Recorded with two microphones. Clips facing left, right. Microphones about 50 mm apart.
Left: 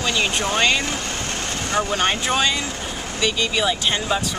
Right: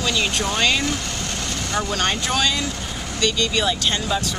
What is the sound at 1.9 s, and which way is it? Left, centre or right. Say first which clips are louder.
Speech: left 1 dB; centre.